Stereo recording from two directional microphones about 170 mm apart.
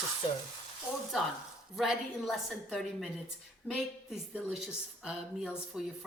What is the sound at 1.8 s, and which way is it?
Speech, centre (ahead or behind).